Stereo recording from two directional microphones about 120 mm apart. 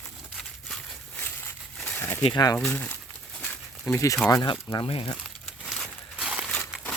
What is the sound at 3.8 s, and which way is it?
Speech, 25° left (ahead or behind).